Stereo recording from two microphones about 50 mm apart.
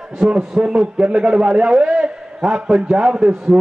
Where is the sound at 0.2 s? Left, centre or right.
Centre.